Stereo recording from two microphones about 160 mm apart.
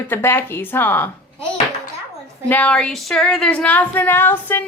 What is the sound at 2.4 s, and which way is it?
Speech, 10° left (ahead or behind).